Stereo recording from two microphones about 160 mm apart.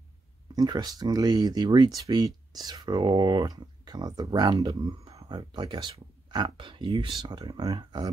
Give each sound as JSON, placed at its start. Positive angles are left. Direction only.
{"t": 0.6, "sound": "speech", "side_deg": -25}